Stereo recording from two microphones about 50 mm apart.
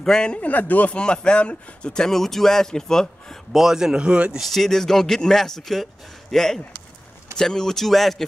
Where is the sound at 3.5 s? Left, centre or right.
Centre.